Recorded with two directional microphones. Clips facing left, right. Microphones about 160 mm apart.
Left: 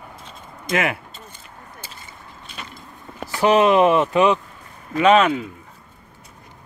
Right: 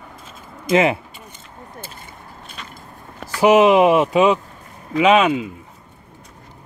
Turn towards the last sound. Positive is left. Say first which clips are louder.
# right 1 dB
turn(degrees=-10)  # may be behind; listen again after turning